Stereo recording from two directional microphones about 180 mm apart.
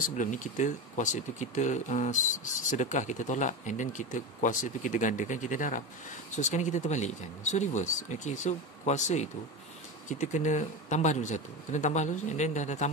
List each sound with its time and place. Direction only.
0.2 s speech: 45° left (ahead or behind)